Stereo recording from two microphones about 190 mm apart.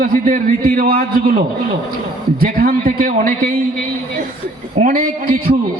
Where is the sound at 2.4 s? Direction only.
50° right (ahead or behind).